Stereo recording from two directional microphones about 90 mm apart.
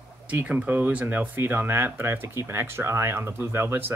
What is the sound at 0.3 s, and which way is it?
Speech, 15° right (ahead or behind).